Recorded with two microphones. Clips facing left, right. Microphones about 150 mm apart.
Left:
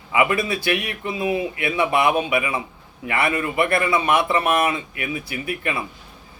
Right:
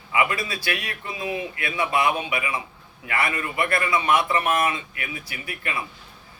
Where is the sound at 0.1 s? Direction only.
25° left (ahead or behind).